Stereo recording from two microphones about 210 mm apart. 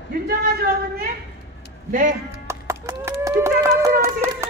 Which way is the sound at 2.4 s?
15° right (ahead or behind).